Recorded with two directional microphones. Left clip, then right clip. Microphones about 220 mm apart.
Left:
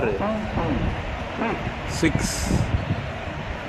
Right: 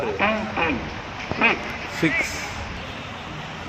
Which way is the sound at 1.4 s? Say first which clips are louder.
Right 8 dB; 40° left (ahead or behind).